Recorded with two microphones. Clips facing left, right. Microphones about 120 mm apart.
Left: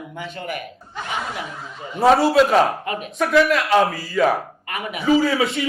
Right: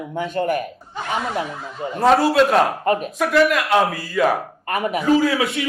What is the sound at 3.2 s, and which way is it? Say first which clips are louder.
A man's voice: left 2 dB; centre (ahead or behind).